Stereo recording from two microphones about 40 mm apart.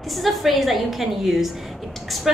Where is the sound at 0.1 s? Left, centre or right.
Centre.